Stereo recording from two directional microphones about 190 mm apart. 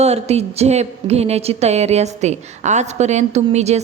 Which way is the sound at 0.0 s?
35° right (ahead or behind).